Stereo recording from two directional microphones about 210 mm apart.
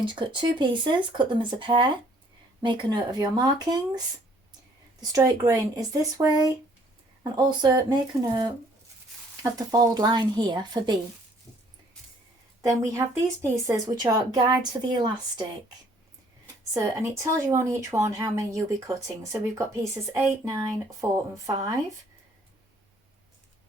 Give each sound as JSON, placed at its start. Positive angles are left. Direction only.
{"t": 0.0, "sound": "speech", "side_deg": -20}
{"t": 12.6, "sound": "speech", "side_deg": -15}
{"t": 16.7, "sound": "speech", "side_deg": -15}